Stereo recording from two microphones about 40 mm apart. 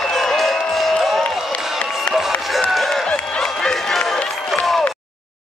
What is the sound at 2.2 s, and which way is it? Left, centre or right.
Music, centre.